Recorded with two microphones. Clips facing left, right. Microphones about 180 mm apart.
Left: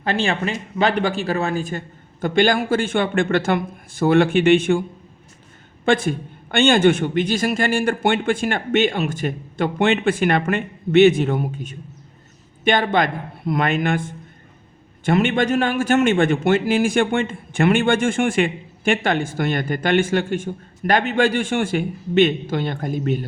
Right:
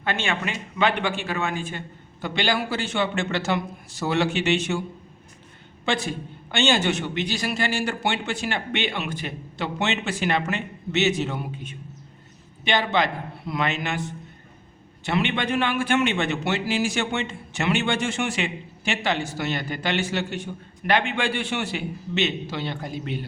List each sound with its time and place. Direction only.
0.0 s a man's voice: 35° left (ahead or behind); by 4.8 s 55° left (ahead or behind)
5.8 s a man's voice: 50° left (ahead or behind)